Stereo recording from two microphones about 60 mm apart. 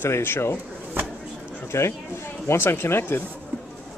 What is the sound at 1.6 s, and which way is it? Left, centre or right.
Speech, left.